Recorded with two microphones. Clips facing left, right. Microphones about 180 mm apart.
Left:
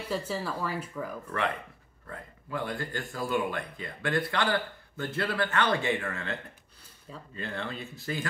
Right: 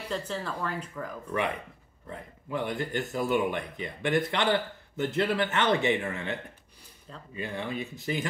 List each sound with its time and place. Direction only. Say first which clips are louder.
0.1 s speech: left 1 dB; 5° left (ahead or behind)
1.3 s speech: right 3 dB; 15° right (ahead or behind)
7.3 s speech: right 3 dB; 15° right (ahead or behind)